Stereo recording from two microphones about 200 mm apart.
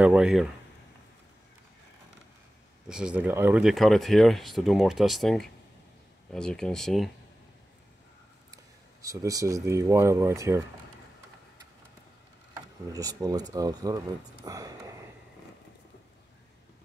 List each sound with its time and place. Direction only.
0.0 s speech: 5° right (ahead or behind)
2.9 s speech: 5° right (ahead or behind)
9.0 s speech: 15° right (ahead or behind)
12.5 s speech: 20° right (ahead or behind)